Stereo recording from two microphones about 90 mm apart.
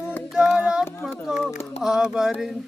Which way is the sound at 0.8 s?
25° left (ahead or behind).